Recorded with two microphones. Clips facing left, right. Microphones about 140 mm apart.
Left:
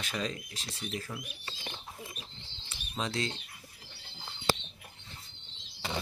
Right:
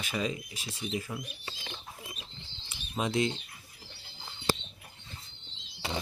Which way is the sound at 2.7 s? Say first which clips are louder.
Right 4 dB; 15° right (ahead or behind).